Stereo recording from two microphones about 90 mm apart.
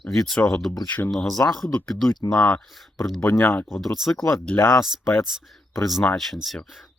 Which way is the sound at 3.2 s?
25° left (ahead or behind).